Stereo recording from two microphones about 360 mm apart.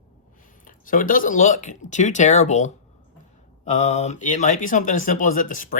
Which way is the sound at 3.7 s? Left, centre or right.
Centre.